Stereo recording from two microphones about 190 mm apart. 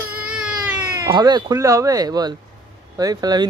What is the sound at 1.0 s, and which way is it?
A child's voice, 20° right (ahead or behind).